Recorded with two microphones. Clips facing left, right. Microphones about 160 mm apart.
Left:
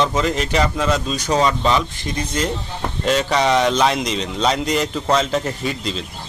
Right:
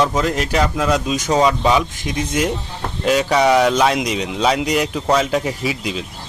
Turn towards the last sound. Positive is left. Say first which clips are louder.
# right 1 dB
turn(degrees=-10)  # may be behind; listen again after turning